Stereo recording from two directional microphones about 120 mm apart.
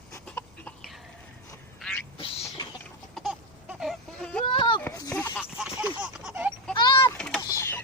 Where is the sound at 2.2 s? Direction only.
45° left (ahead or behind).